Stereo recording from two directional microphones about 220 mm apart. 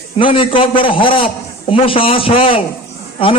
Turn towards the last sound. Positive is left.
turn(degrees=25)  # may be behind; listen again after turning